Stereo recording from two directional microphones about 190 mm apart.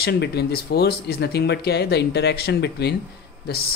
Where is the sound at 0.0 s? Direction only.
60° left (ahead or behind).